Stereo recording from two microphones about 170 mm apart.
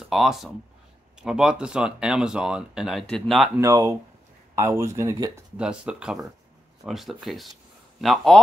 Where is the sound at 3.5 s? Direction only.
20° right (ahead or behind).